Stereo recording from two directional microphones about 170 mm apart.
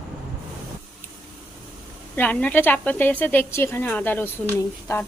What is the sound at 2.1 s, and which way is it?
Speech, 10° left (ahead or behind).